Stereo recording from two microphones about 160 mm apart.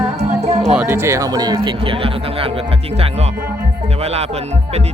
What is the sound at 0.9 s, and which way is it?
Speech, 15° right (ahead or behind).